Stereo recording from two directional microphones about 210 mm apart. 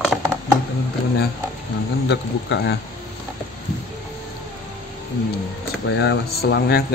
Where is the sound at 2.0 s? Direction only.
50° left (ahead or behind).